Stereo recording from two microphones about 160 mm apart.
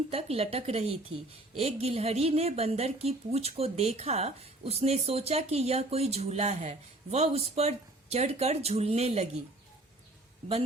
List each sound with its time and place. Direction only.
0.1 s a woman's voice: 40° right (ahead or behind)